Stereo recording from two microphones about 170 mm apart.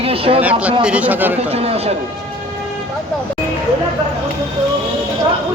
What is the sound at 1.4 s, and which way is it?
Speech, 35° right (ahead or behind).